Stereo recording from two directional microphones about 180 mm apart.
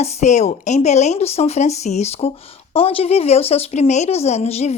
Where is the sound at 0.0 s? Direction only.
40° left (ahead or behind).